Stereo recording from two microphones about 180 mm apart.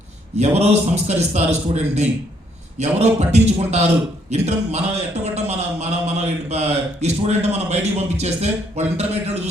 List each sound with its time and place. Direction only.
0.3 s a man's voice: 35° right (ahead or behind)